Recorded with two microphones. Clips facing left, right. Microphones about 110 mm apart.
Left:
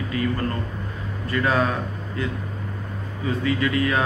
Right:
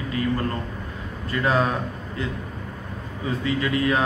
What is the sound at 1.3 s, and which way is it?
Speech, 25° right (ahead or behind).